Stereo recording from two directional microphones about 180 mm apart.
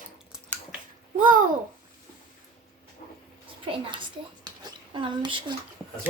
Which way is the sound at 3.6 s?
25° right (ahead or behind).